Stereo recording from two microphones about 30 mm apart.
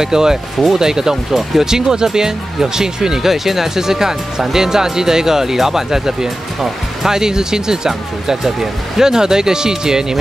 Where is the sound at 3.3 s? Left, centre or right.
Centre.